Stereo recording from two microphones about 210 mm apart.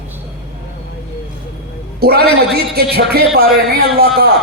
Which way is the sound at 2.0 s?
50° right (ahead or behind).